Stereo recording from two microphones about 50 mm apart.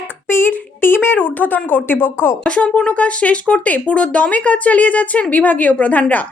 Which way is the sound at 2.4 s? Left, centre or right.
Left.